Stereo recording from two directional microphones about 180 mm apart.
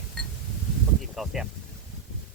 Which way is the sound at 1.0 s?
Centre (ahead or behind).